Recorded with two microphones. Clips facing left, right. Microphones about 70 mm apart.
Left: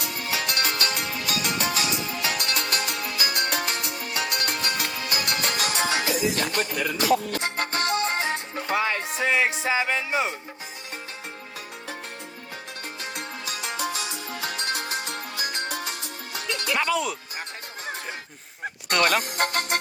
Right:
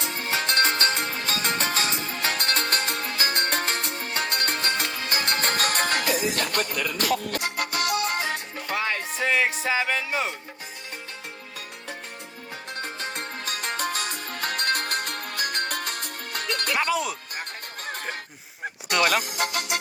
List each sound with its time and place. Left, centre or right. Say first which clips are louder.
0.0 s music: right 1 dB; right
7.3 s music: left 1 dB; left
12.8 s music: right 3 dB; right
16.7 s speech: left 1 dB; centre
18.9 s speech: even; centre
19.2 s speech: left 2 dB; left